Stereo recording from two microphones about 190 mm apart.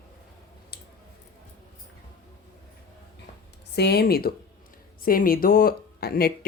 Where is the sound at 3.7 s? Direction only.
60° left (ahead or behind).